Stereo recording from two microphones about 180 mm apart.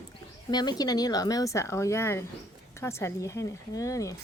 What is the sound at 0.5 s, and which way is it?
A woman's voice, 25° left (ahead or behind).